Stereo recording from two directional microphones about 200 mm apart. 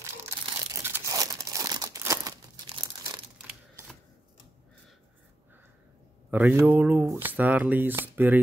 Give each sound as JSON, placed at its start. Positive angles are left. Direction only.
{"t": 0.7, "sound": "tearing", "side_deg": -15}
{"t": 3.4, "sound": "typewriter", "side_deg": -5}
{"t": 6.3, "sound": "speech", "side_deg": -10}